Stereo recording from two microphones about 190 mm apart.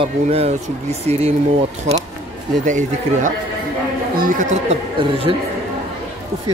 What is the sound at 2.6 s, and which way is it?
Speech, 40° right (ahead or behind).